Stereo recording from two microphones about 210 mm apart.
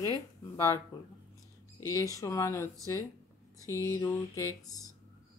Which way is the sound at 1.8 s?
15° left (ahead or behind).